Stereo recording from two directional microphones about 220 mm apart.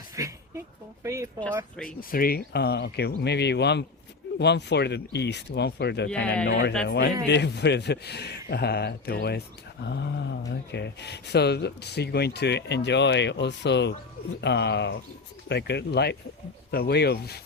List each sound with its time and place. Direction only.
0.2 s a sound: 15° right (ahead or behind)
1.0 s speech: 15° right (ahead or behind)
2.0 s speech: 40° left (ahead or behind)